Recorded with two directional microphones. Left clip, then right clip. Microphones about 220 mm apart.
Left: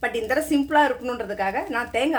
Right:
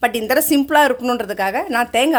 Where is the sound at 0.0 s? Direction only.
50° right (ahead or behind).